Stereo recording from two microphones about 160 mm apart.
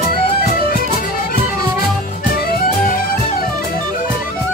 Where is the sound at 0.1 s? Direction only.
65° left (ahead or behind).